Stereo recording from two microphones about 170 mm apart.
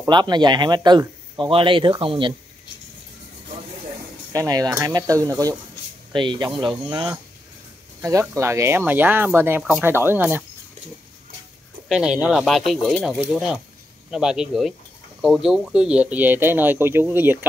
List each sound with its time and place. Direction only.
0.0 s speech: 25° right (ahead or behind)
4.3 s speech: 20° right (ahead or behind)
11.9 s speech: 5° right (ahead or behind)